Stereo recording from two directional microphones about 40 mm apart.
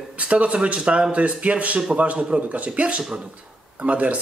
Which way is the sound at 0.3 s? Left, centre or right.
Right.